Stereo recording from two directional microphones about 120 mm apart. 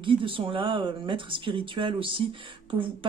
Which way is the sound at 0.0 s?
45° right (ahead or behind).